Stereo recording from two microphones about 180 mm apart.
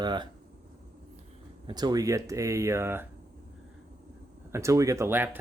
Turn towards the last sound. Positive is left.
turn(degrees=-10)  # may be behind; listen again after turning